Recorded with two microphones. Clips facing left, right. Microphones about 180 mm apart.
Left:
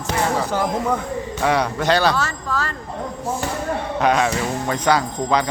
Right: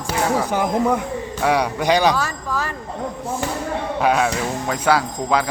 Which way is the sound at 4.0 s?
5° right (ahead or behind).